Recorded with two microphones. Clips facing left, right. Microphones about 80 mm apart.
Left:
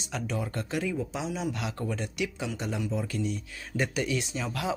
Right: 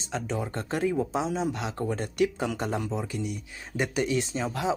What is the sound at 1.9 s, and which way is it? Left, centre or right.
Speech, right.